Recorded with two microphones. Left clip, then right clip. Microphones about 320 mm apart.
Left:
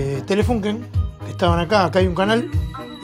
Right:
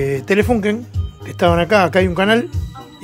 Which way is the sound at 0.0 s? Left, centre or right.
Centre.